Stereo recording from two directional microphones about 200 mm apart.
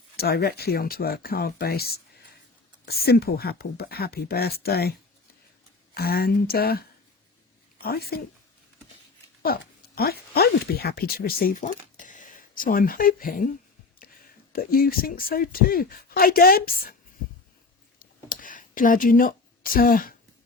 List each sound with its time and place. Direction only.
0.2 s speech: 50° left (ahead or behind)
9.4 s speech: 50° left (ahead or behind)
14.5 s speech: 45° left (ahead or behind)
18.0 s a sound: 45° left (ahead or behind)